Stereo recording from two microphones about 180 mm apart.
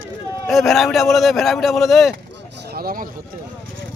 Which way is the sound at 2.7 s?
55° right (ahead or behind).